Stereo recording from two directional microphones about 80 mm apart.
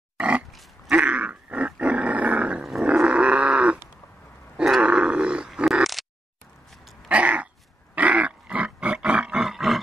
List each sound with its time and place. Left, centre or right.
0.9 s roar: centre
2.6 s roar: centre
3.0 s grunt: centre
4.6 s grunt: centre
4.8 s dog: centre
5.7 s oink: centre
7.1 s a sound: centre
9.5 s roar: centre